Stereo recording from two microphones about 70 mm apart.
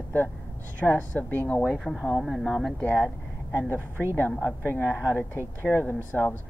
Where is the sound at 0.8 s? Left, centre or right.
Left.